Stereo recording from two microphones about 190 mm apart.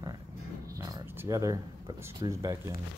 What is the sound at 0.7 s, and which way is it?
Speech, 15° right (ahead or behind).